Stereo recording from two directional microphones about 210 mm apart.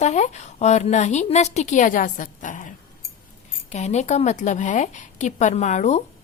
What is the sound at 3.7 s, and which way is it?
A woman's voice, 35° left (ahead or behind).